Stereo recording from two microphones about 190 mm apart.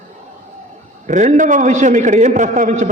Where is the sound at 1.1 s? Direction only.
40° right (ahead or behind).